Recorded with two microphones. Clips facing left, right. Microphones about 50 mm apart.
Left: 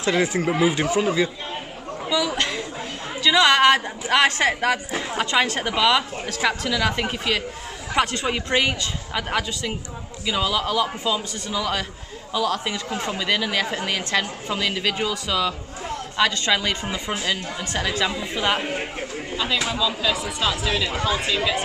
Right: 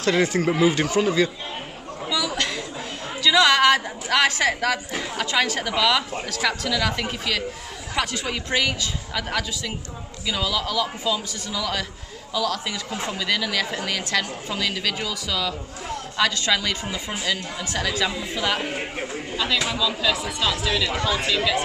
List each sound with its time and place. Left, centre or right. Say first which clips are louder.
0.0 s a woman's voice: right 1 dB; centre
2.0 s chatter: left 2 dB; left
3.3 s a woman's voice: left 1 dB; left
7.9 s a woman's voice: left 4 dB; left; by 21.5 s centre